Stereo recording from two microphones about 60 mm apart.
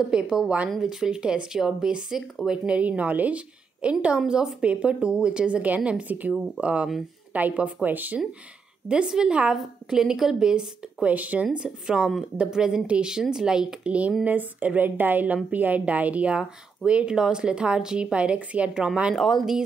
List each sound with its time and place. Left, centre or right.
0.1 s a woman's voice: centre; by 8.2 s right
8.8 s speech: centre
14.2 s a woman's voice: right
19.1 s speech: centre